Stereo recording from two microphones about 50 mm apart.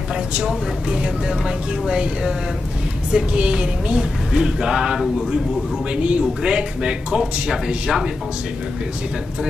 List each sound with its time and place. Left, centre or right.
0.8 s speech: centre
3.1 s speech: centre